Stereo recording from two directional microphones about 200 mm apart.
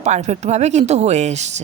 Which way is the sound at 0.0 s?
35° right (ahead or behind).